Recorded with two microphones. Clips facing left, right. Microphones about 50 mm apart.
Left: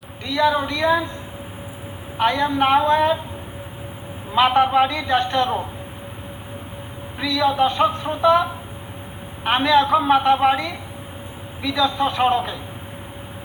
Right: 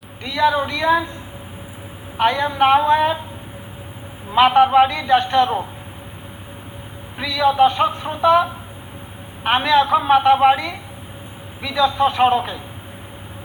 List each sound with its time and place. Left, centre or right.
0.3 s a man's voice: centre
2.1 s a man's voice: centre
4.3 s a man's voice: centre
7.2 s a man's voice: centre